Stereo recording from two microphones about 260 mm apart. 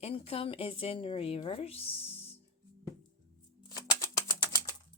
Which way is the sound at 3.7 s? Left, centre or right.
Centre.